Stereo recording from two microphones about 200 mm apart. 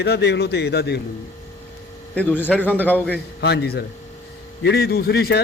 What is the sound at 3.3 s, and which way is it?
A man's voice, 55° left (ahead or behind).